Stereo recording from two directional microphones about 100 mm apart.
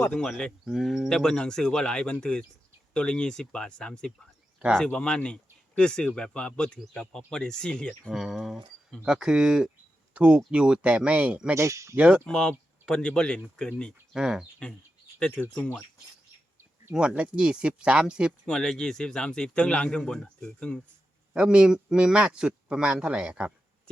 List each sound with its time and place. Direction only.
0.0 s speech: 10° left (ahead or behind)
8.1 s a man's voice: 5° right (ahead or behind)
11.5 s speech: 30° right (ahead or behind)
11.9 s a man's voice: 15° right (ahead or behind)
12.2 s speech: 10° left (ahead or behind)
14.1 s a man's voice: 5° right (ahead or behind)
15.2 s speech: 15° left (ahead or behind)
16.9 s a man's voice: 10° right (ahead or behind)
18.4 s speech: 10° left (ahead or behind)
21.3 s a man's voice: 10° right (ahead or behind)